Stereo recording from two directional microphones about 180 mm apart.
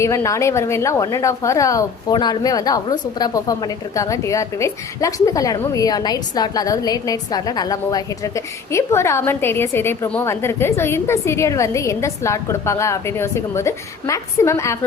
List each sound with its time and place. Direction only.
0.0 s a woman's voice: 15° left (ahead or behind)